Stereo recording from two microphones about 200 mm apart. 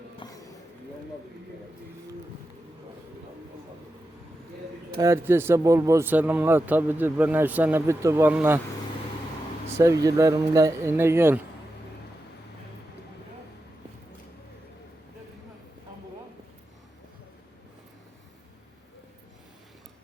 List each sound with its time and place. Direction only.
0.2 s a sound: 25° left (ahead or behind)
4.9 s speech: 15° right (ahead or behind)
9.7 s speech: 15° right (ahead or behind)